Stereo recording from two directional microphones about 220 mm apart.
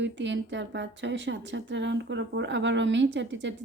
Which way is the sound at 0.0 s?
55° right (ahead or behind).